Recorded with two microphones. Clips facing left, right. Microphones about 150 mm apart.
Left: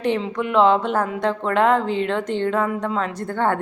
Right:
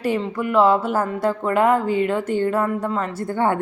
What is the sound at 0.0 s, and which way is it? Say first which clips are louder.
A woman's voice: even; 5° right (ahead or behind).